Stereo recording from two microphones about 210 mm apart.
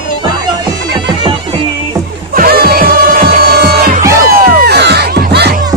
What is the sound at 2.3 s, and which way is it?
Music, 45° right (ahead or behind).